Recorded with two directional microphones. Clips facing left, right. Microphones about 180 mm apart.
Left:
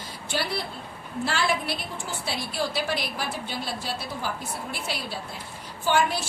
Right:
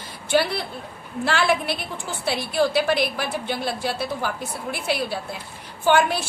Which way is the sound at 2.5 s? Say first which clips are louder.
Right 9 dB; 60° right (ahead or behind).